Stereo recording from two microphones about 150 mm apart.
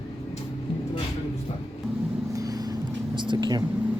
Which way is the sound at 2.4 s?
25° right (ahead or behind).